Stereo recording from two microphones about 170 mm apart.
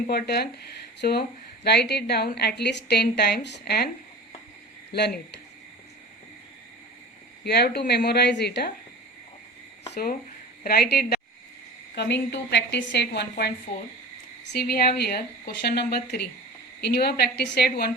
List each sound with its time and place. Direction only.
0.1 s a woman's voice: 70° left (ahead or behind)
1.6 s a woman's voice: 75° left (ahead or behind)
4.9 s a woman's voice: 75° left (ahead or behind)
7.4 s a woman's voice: 75° left (ahead or behind)
9.9 s a woman's voice: 70° left (ahead or behind)
11.9 s a woman's voice: 90° left
14.4 s a woman's voice: 70° left (ahead or behind)